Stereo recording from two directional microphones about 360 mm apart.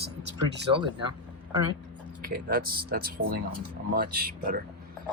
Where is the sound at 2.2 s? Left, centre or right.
Right.